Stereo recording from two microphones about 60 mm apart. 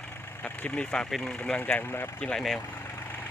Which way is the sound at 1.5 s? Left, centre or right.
Left.